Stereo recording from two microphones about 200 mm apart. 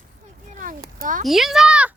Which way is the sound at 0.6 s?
45° right (ahead or behind).